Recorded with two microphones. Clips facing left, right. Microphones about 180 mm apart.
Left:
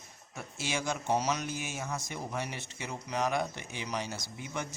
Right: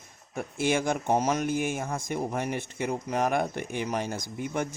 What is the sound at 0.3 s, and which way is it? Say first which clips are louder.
Speech: right 9 dB; 55° right (ahead or behind).